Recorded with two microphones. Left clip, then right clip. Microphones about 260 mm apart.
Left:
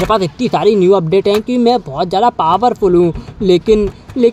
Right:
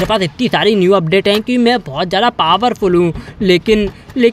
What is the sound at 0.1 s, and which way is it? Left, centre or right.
Speech, centre.